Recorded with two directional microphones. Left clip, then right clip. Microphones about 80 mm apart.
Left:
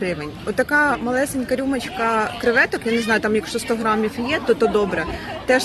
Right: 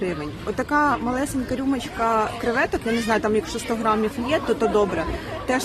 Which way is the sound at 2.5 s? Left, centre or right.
Right.